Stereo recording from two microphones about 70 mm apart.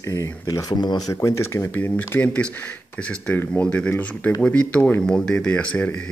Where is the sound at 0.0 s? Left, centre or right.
Left.